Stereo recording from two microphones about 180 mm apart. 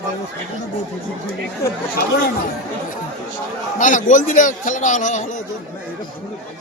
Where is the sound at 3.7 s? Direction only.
45° left (ahead or behind).